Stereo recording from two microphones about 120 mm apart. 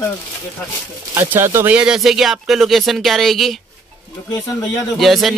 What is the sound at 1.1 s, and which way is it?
Speech, 20° right (ahead or behind).